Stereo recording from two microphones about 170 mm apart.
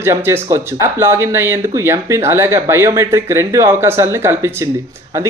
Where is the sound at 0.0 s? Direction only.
15° right (ahead or behind).